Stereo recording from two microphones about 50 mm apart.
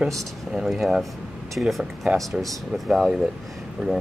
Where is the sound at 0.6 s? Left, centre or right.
Centre.